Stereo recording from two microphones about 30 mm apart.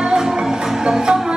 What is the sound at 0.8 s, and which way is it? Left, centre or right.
Music, right.